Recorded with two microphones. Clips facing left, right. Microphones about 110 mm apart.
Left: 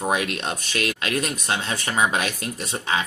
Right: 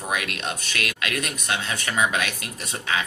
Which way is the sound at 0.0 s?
30° left (ahead or behind).